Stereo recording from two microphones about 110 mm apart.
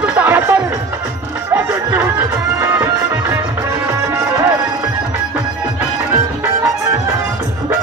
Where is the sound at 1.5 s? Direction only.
20° right (ahead or behind).